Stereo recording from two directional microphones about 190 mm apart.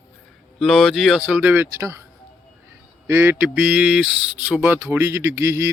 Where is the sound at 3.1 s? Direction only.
10° right (ahead or behind).